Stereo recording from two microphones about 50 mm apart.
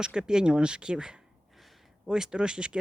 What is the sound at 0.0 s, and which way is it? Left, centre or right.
Speech, centre.